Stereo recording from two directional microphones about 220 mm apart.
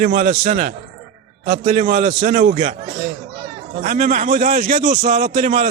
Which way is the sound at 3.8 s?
35° right (ahead or behind).